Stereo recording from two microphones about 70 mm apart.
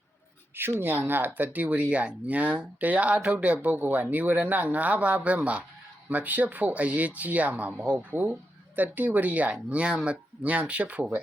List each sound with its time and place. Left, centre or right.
0.5 s speech: right